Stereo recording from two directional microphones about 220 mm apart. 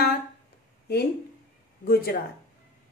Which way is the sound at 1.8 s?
45° left (ahead or behind).